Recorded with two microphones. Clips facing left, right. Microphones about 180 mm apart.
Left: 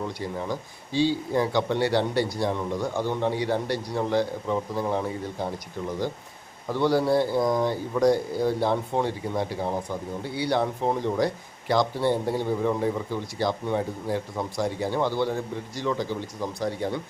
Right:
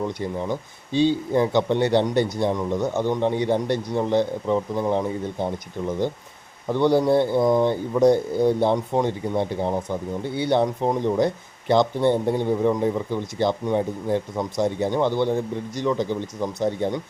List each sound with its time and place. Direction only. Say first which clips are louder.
0.9 s speech: right 4 dB; 20° right (ahead or behind)
6.7 s speech: right 4 dB; 20° right (ahead or behind)